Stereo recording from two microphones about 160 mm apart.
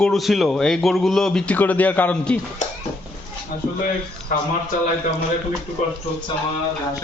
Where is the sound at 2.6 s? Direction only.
50° left (ahead or behind).